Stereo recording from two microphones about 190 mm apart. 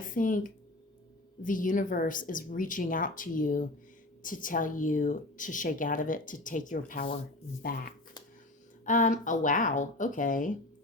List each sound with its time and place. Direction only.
0.0 s speech: 45° left (ahead or behind)
8.8 s speech: 45° left (ahead or behind)